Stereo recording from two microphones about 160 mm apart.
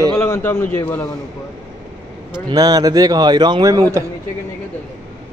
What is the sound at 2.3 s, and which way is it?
A man's voice, 25° right (ahead or behind).